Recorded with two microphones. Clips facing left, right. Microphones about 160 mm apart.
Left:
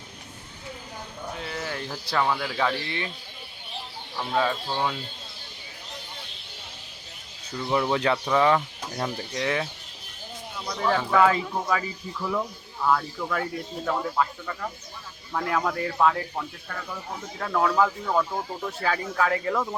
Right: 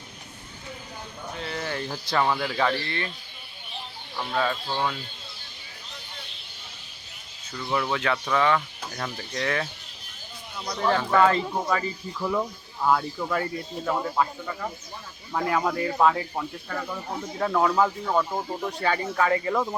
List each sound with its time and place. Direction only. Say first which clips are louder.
1.4 s speech: right 3 dB; 5° left (ahead or behind)
4.2 s speech: left 1 dB; 10° left (ahead or behind)
7.6 s speech: left 3 dB; 20° left (ahead or behind)
10.7 s speech: right 1 dB; centre (ahead or behind)